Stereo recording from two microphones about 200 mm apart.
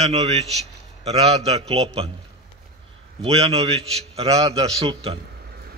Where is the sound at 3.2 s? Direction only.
30° right (ahead or behind).